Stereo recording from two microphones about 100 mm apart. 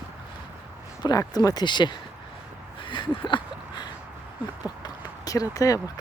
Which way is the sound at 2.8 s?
55° left (ahead or behind).